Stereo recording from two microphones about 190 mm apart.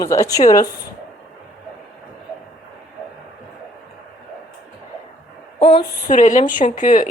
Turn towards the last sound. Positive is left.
turn(degrees=40)  # may be behind; listen again after turning